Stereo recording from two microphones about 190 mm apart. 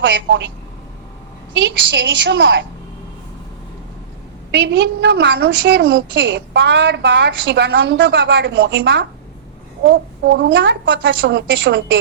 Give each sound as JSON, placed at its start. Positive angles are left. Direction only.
{"t": 0.0, "sound": "a woman's voice", "side_deg": -70}
{"t": 1.5, "sound": "a woman's voice", "side_deg": -70}
{"t": 4.5, "sound": "a woman's voice", "side_deg": -70}